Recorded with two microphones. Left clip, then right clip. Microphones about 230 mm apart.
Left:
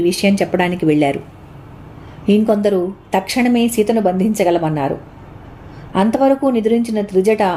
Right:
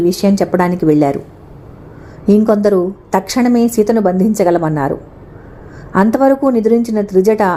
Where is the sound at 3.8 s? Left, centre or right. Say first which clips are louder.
Right 3 dB; centre.